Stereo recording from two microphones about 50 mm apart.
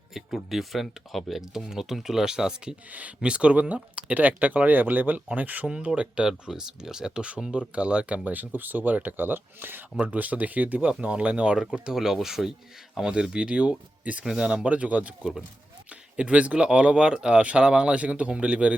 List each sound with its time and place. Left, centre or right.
0.1 s speech: centre; by 5.6 s right
5.6 s speech: centre
8.2 s speech: right
10.0 s speech: right
10.9 s speech: right
14.3 s speech: centre
14.6 s speech: right
15.2 s speech: centre
16.1 s speech: right